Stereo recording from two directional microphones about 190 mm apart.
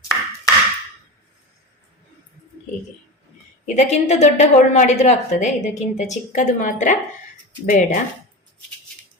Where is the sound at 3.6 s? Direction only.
35° left (ahead or behind).